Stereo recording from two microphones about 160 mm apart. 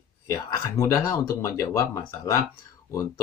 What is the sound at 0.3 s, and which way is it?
Speech, 20° left (ahead or behind).